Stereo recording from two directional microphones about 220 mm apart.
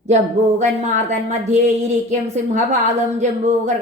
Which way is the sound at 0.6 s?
35° right (ahead or behind).